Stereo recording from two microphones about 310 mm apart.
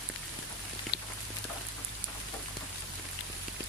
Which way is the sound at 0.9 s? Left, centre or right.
Left.